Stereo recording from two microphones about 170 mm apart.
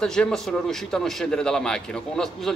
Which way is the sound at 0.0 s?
5° left (ahead or behind).